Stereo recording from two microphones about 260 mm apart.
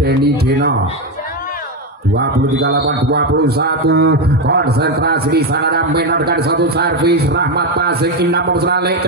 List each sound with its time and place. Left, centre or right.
2.1 s music: right